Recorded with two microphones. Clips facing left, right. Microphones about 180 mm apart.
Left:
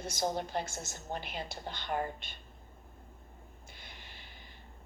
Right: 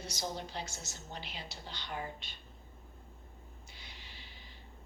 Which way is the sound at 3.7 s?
50° left (ahead or behind).